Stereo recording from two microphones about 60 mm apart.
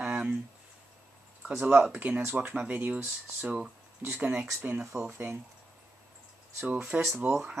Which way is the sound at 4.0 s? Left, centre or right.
Right.